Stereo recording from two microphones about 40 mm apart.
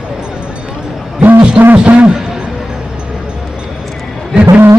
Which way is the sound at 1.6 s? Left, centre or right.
Right.